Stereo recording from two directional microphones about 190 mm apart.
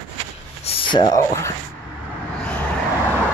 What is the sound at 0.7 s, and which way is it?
Speech, 25° left (ahead or behind).